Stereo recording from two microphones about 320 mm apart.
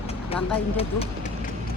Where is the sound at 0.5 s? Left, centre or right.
Centre.